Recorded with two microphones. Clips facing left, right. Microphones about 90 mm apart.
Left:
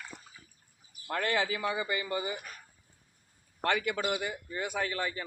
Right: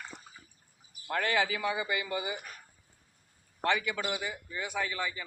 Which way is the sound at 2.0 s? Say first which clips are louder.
Left 1 dB; 35° left (ahead or behind).